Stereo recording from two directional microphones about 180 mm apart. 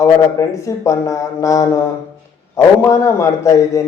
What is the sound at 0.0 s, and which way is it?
A man's voice, 15° left (ahead or behind).